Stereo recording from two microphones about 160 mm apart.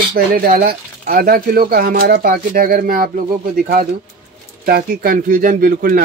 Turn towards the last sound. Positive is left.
turn(degrees=-65)  # may be behind; listen again after turning